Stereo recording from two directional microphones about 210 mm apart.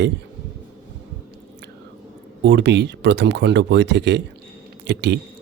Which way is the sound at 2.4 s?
55° right (ahead or behind).